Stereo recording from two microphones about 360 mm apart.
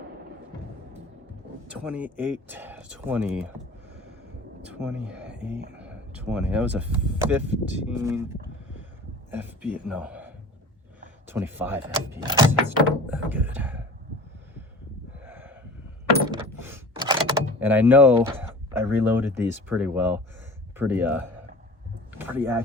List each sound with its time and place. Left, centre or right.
1.8 s speech: centre
4.6 s speech: centre
5.5 s speech: right
5.8 s a man's voice: centre
15.2 s gasp: centre
16.3 s a sound: centre
19.4 s speech: centre